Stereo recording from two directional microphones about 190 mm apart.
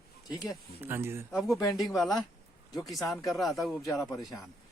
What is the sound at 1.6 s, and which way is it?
Speech, 20° left (ahead or behind).